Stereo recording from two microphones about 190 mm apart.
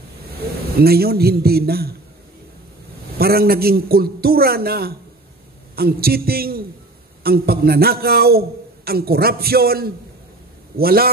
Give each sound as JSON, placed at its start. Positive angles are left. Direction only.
{"t": 0.7, "sound": "a man's voice", "side_deg": -55}
{"t": 3.2, "sound": "a man's voice", "side_deg": -55}